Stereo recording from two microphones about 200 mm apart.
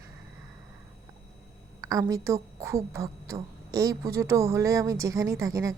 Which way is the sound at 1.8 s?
15° right (ahead or behind).